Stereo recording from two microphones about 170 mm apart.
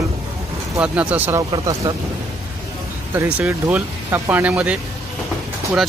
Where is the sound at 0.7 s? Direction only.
10° right (ahead or behind).